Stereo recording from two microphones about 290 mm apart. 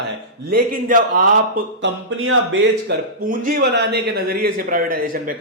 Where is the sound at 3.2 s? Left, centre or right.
Right.